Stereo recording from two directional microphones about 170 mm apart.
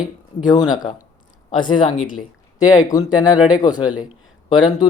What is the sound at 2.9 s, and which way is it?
Speech, 20° left (ahead or behind).